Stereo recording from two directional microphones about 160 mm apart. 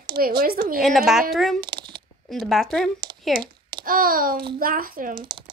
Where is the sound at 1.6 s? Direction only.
30° right (ahead or behind).